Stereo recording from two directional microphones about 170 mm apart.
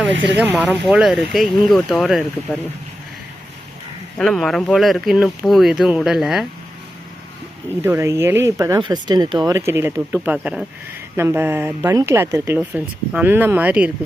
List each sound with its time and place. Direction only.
0.3 s speech: 5° right (ahead or behind)
4.2 s speech: 5° left (ahead or behind)
7.8 s speech: 15° right (ahead or behind)